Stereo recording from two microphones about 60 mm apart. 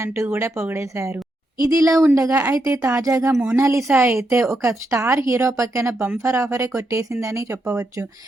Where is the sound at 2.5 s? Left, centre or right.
Right.